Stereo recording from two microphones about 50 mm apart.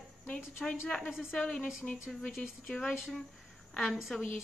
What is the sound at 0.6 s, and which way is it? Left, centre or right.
Speech, centre.